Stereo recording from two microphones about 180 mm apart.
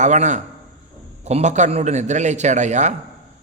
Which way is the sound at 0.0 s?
40° right (ahead or behind).